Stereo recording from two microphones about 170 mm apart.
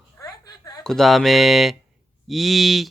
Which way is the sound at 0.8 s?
Centre (ahead or behind).